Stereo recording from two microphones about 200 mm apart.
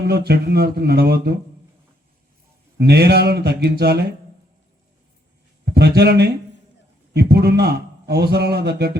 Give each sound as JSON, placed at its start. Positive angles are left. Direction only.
{"t": 0.0, "sound": "a man's voice", "side_deg": -55}
{"t": 2.7, "sound": "a man's voice", "side_deg": -55}
{"t": 5.6, "sound": "a man's voice", "side_deg": -55}